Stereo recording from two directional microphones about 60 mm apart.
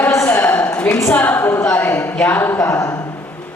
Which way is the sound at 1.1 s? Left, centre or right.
Left.